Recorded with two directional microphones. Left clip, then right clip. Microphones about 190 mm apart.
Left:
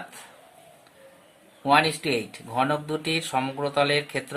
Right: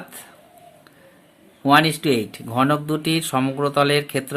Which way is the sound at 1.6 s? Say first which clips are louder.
Right 5 dB; 40° right (ahead or behind).